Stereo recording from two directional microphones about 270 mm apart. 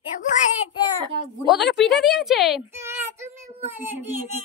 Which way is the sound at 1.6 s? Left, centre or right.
Left.